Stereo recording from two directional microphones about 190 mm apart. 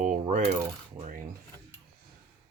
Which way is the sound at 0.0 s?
40° right (ahead or behind).